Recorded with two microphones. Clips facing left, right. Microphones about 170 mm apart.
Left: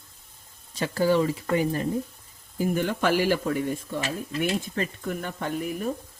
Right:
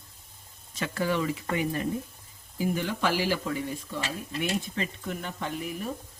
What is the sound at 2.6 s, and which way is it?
Speech, 50° left (ahead or behind).